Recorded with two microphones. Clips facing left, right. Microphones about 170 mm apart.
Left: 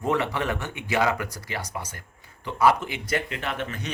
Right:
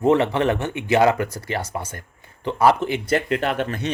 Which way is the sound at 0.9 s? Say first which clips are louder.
Right 7 dB; 40° right (ahead or behind).